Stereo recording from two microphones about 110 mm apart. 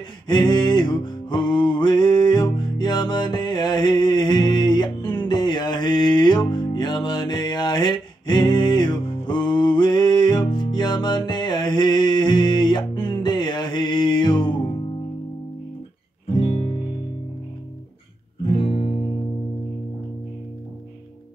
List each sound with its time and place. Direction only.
0.3 s music: 45° left (ahead or behind)
16.3 s music: 60° left (ahead or behind)
18.5 s music: 50° left (ahead or behind)